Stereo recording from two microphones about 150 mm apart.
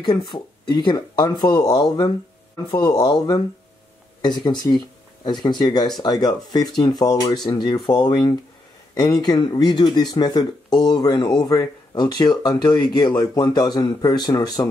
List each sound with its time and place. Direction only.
0.0 s speech: 30° left (ahead or behind)